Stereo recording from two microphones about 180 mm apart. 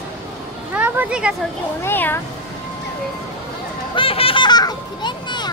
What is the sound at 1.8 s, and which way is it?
Cat, 10° left (ahead or behind).